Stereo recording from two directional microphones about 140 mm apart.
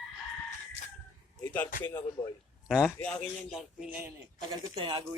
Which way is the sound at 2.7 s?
Centre (ahead or behind).